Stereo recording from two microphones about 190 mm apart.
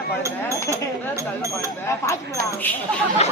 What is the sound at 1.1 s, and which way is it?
Speech, 15° right (ahead or behind).